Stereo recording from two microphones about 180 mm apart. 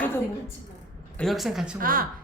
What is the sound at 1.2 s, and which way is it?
Speech, centre (ahead or behind).